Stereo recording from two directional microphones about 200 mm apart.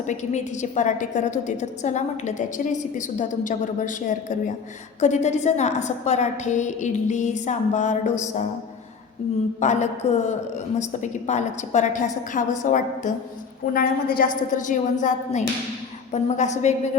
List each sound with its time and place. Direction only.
0.1 s a woman's voice: 35° left (ahead or behind)
9.6 s a woman's voice: 35° left (ahead or behind)